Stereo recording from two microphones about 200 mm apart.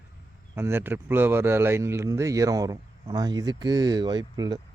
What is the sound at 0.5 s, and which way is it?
Speech, 10° right (ahead or behind).